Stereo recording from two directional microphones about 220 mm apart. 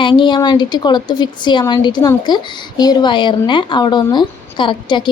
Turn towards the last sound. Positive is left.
turn(degrees=20)  # may be behind; listen again after turning